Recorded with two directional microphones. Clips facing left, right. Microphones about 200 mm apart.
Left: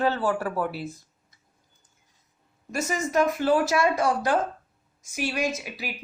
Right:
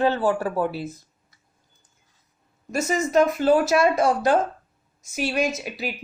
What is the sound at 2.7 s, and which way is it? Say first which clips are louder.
Speech: right 4 dB; 25° right (ahead or behind).